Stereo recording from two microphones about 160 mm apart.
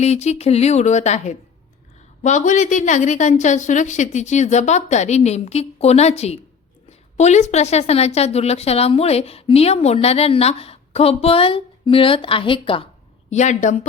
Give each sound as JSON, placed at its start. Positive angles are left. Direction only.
{"t": 0.0, "sound": "a woman's voice", "side_deg": 45}
{"t": 13.3, "sound": "a woman's voice", "side_deg": 45}